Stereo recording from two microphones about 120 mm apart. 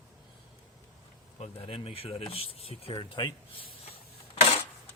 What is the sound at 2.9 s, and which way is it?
Speech, 40° left (ahead or behind).